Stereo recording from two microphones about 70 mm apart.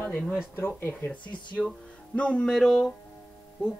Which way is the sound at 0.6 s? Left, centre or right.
Left.